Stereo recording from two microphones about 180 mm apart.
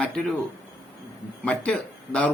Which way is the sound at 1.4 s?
5° left (ahead or behind).